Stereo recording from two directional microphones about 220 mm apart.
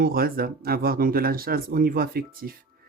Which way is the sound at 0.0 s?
40° right (ahead or behind).